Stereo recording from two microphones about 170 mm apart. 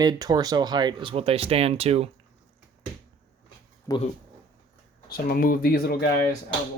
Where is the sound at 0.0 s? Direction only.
25° right (ahead or behind).